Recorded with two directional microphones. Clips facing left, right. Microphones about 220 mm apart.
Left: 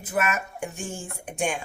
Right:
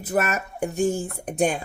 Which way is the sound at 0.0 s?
40° right (ahead or behind).